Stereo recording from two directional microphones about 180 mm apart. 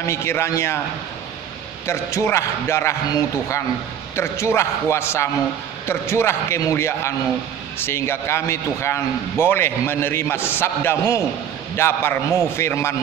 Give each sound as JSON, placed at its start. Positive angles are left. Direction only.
{"t": 0.0, "sound": "a man's voice", "side_deg": 15}
{"t": 1.9, "sound": "a man's voice", "side_deg": 15}